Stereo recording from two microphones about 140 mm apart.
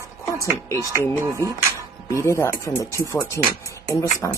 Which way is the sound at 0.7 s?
25° right (ahead or behind).